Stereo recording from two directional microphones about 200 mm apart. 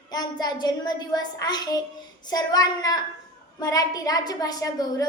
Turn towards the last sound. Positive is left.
turn(degrees=20)  # may be behind; listen again after turning